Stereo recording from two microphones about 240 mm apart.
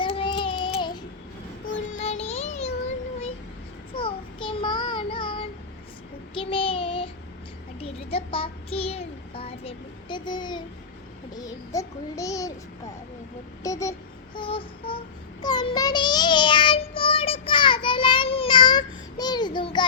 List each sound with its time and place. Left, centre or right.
0.0 s child singing: left
1.9 s music: left
3.9 s child singing: left
13.6 s a sound: centre
14.3 s child singing: left